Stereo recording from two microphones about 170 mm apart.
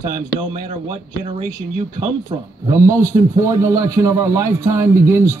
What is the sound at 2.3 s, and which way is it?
Speech, 25° right (ahead or behind).